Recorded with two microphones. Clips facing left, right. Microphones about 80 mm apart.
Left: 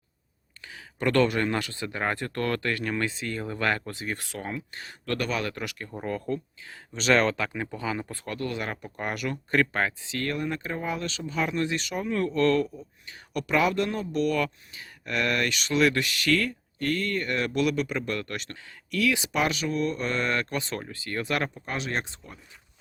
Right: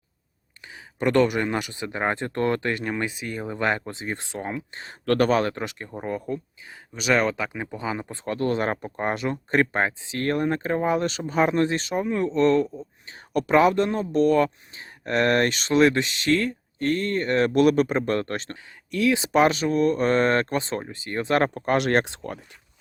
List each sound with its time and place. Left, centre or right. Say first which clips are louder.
0.6 s speech: right 3 dB; right
5.0 s speech: right 9 dB; right
5.9 s speech: even; centre
10.3 s speech: right 7 dB; right
18.5 s speech: right 2 dB; right
21.7 s speech: right 10 dB; right